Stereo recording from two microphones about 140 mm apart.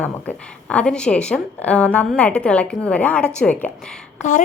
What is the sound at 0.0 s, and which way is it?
A woman's voice, 10° left (ahead or behind).